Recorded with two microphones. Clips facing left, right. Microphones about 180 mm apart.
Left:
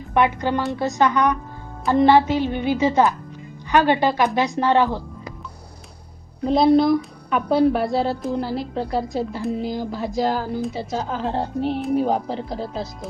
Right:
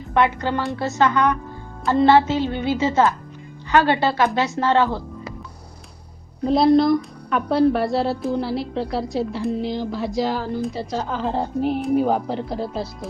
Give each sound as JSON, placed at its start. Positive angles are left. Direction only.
{"t": 0.1, "sound": "speech", "side_deg": 15}
{"t": 6.4, "sound": "a woman's voice", "side_deg": 0}